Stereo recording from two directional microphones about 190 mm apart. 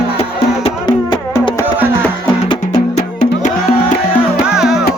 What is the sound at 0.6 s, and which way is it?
Music, 25° left (ahead or behind).